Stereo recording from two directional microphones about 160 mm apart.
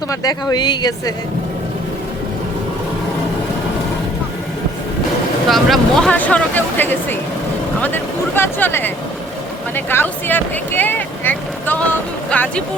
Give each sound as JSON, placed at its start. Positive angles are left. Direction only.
{"t": 0.1, "sound": "speech", "side_deg": 25}
{"t": 5.5, "sound": "speech", "side_deg": 0}